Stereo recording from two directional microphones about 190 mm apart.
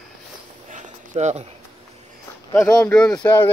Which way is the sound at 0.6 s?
40° right (ahead or behind).